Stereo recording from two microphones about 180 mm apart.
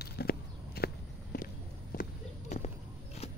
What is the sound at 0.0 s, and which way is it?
Walk, 60° left (ahead or behind).